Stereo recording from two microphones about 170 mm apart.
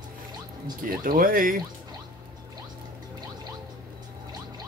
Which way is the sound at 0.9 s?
55° right (ahead or behind).